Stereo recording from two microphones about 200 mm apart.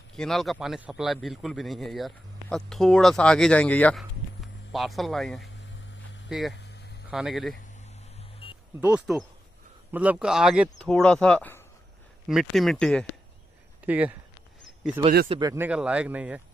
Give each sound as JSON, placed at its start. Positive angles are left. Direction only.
{"t": 0.1, "sound": "a man's voice", "side_deg": 0}
{"t": 8.4, "sound": "vehicle", "side_deg": 25}
{"t": 8.8, "sound": "a man's voice", "side_deg": -5}
{"t": 13.8, "sound": "speech", "side_deg": -10}
{"t": 15.2, "sound": "speech", "side_deg": -25}
{"t": 15.5, "sound": "speech", "side_deg": -10}